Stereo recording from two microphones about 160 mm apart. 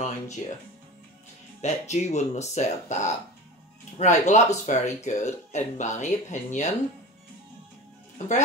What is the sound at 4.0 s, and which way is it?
Speech, 50° left (ahead or behind).